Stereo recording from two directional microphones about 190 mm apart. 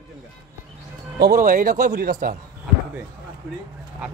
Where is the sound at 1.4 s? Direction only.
45° right (ahead or behind).